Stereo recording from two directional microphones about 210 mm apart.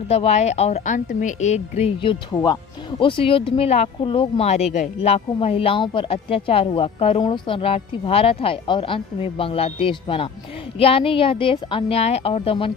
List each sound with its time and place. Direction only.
0.1 s speech: 30° left (ahead or behind)